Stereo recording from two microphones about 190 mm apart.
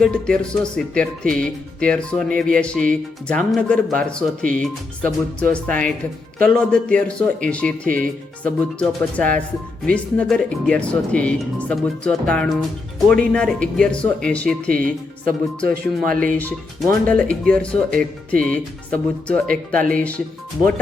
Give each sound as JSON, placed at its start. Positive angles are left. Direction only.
{"t": 0.0, "sound": "speech", "side_deg": 5}
{"t": 15.3, "sound": "speech", "side_deg": -45}
{"t": 17.1, "sound": "speech", "side_deg": 5}